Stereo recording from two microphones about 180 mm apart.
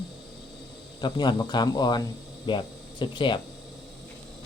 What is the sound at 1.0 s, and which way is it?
Speech, 25° left (ahead or behind).